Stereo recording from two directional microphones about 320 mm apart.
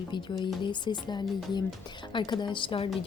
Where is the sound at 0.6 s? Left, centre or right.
Centre.